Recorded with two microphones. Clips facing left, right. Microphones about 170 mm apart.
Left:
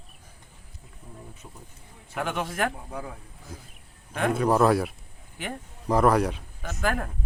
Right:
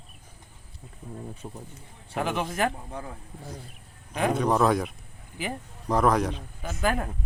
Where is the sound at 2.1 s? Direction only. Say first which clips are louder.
Right 1 dB; centre (ahead or behind).